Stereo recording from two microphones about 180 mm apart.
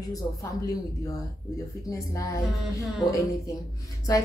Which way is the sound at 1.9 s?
20° left (ahead or behind).